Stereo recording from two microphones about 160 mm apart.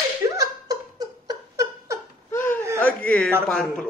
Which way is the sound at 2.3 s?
15° left (ahead or behind).